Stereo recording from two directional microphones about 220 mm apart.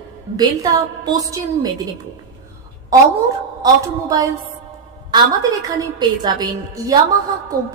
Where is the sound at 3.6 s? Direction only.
15° right (ahead or behind).